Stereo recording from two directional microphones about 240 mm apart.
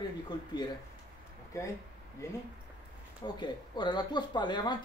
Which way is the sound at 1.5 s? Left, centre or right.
Centre.